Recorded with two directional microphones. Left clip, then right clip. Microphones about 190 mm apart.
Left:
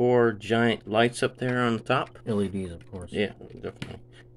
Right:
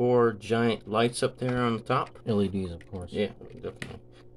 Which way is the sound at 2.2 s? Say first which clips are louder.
Right 1 dB; 20° right (ahead or behind).